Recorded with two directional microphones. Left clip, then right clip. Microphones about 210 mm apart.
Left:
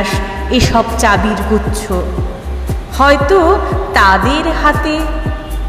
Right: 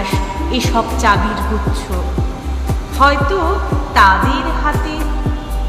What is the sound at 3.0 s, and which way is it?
Music, 20° left (ahead or behind).